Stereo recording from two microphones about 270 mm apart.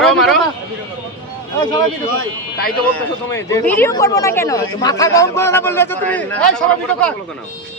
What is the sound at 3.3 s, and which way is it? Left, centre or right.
Speech, centre.